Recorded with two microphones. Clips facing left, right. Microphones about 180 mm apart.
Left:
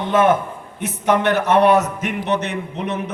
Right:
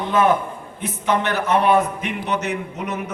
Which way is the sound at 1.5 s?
70° left (ahead or behind).